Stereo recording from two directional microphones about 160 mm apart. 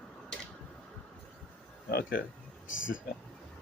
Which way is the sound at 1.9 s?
70° left (ahead or behind).